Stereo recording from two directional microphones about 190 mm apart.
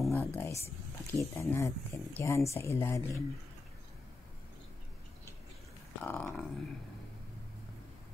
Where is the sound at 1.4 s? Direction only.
15° left (ahead or behind).